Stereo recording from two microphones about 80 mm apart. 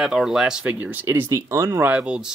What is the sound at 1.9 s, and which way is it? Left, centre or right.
Speech, centre.